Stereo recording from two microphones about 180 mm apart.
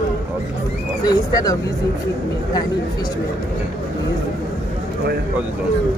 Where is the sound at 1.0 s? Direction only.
20° left (ahead or behind).